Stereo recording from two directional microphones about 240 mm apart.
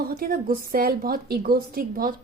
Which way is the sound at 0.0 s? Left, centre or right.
Right.